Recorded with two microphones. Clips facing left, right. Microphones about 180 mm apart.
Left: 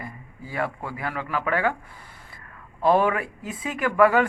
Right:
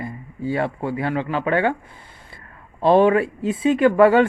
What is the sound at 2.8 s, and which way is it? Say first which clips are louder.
A man's voice: right 6 dB; 30° right (ahead or behind).